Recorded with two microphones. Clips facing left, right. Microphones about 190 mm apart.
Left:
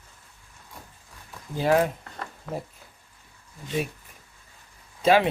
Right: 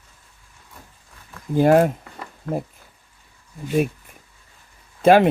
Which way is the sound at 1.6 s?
50° right (ahead or behind).